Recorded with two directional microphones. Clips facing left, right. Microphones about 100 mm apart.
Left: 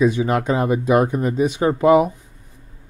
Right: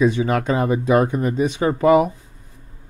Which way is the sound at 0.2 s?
20° left (ahead or behind).